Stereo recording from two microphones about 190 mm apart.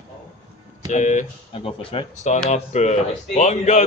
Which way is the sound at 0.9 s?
40° left (ahead or behind).